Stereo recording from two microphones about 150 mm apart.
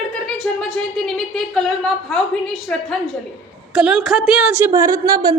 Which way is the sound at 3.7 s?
5° right (ahead or behind).